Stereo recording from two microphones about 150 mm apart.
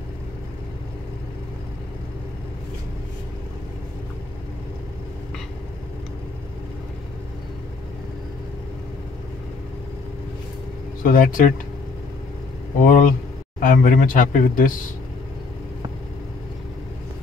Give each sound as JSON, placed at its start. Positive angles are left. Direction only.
{"t": 11.0, "sound": "speech", "side_deg": 65}
{"t": 12.8, "sound": "speech", "side_deg": 60}